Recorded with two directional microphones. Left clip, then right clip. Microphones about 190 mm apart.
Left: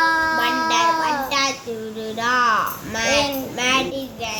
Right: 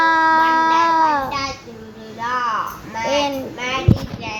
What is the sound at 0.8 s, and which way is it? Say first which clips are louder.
Cat: right 4 dB; 40° right (ahead or behind).